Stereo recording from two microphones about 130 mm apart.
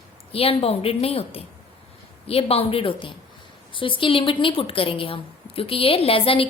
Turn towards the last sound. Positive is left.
turn(degrees=45)  # may be behind; listen again after turning